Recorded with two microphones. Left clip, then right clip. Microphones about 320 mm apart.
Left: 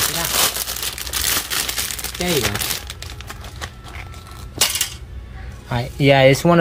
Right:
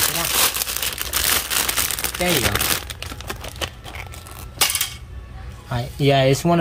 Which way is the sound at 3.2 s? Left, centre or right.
Right.